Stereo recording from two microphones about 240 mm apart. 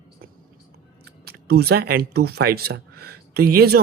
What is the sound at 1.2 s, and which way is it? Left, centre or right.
Speech, right.